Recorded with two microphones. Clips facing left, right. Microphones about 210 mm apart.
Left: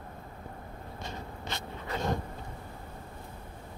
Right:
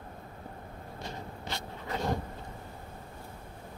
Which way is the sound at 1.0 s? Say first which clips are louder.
Even; 20° left (ahead or behind).